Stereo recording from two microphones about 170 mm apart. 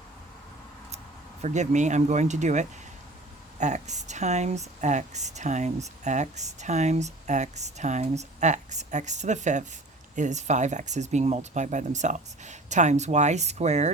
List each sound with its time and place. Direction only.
1.4 s speech: 45° right (ahead or behind)